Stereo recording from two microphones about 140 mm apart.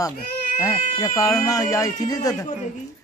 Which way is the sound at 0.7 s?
25° left (ahead or behind).